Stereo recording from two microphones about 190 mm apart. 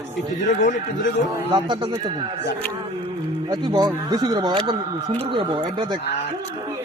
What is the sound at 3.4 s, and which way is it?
Speech, 20° right (ahead or behind).